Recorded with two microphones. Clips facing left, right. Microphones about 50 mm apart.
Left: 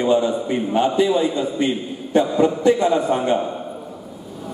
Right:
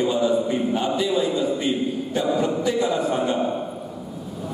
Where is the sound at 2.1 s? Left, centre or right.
Left.